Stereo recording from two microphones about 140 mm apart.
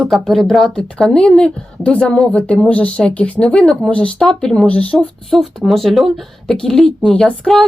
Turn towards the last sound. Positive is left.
turn(degrees=5)  # may be behind; listen again after turning